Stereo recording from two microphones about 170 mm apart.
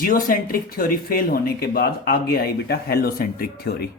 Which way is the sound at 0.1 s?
55° left (ahead or behind).